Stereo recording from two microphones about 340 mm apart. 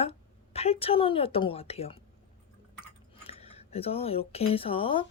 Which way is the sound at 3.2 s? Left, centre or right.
Centre.